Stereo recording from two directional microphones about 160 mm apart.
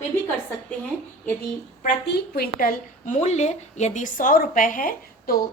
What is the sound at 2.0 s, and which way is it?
A woman's voice, 90° left.